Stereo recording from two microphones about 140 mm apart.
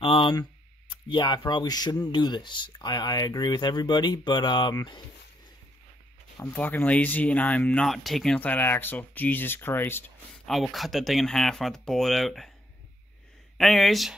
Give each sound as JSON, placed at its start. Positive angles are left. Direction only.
{"t": 0.0, "sound": "a sound", "side_deg": 40}
{"t": 1.0, "sound": "speech", "side_deg": 35}
{"t": 6.5, "sound": "speech", "side_deg": 10}
{"t": 10.4, "sound": "speech", "side_deg": 0}
{"t": 13.6, "sound": "speech", "side_deg": 0}